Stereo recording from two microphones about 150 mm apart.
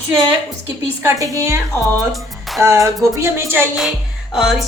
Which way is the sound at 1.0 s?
20° right (ahead or behind).